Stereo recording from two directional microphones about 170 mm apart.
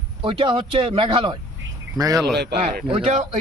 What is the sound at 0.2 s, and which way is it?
A man's voice, 30° right (ahead or behind).